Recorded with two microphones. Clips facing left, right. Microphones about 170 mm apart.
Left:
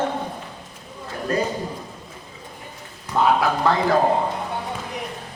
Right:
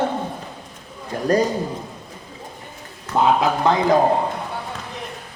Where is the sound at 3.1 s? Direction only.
20° right (ahead or behind).